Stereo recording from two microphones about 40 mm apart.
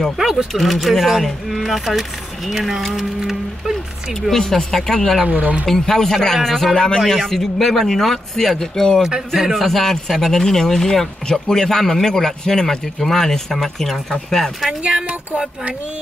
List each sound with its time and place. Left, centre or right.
0.2 s speech: centre
3.0 s music: centre
4.1 s a man's voice: centre
5.2 s speech: right
5.7 s a man's voice: centre
14.8 s speech: right